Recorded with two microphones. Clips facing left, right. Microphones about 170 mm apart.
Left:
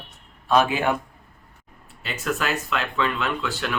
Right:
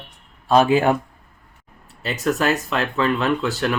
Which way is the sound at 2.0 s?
40° right (ahead or behind).